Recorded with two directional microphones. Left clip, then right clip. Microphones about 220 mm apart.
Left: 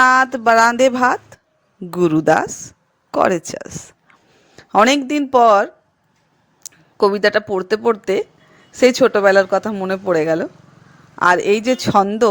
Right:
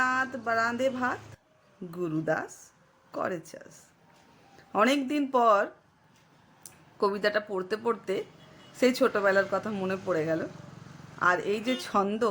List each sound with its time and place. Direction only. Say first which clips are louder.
0.0 s speech: left 16 dB; 40° left (ahead or behind)
10.5 s vehicle: left 1 dB; centre (ahead or behind)
11.2 s speech: left 12 dB; 40° left (ahead or behind)